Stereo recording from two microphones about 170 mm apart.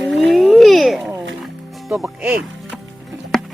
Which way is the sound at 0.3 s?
5° left (ahead or behind).